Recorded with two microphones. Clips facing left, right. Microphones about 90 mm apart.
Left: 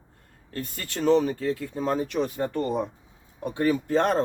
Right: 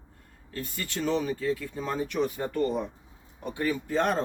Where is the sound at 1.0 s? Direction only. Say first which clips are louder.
Left 6 dB; 35° left (ahead or behind).